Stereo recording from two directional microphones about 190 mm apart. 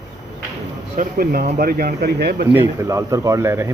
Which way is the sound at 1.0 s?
50° right (ahead or behind).